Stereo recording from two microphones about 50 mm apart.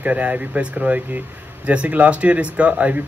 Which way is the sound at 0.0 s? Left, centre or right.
Right.